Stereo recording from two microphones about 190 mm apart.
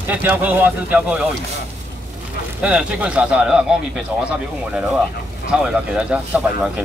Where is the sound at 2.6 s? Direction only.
5° right (ahead or behind).